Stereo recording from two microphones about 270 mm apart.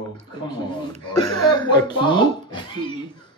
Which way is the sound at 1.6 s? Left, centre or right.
Centre.